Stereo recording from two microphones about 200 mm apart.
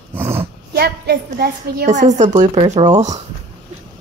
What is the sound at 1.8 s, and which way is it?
Speech, 35° right (ahead or behind).